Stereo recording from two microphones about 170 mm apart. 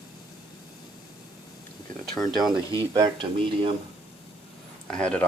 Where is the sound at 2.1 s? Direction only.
Centre (ahead or behind).